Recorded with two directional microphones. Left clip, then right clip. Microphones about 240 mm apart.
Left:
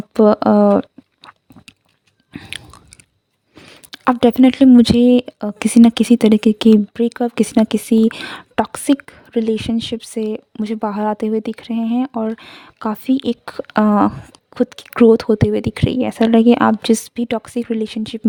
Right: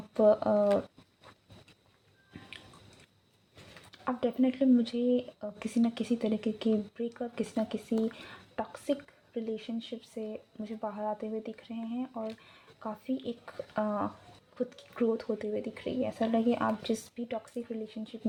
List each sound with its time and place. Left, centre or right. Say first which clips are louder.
0.1 s speech: left 12 dB; left
3.9 s speech: left 18 dB; left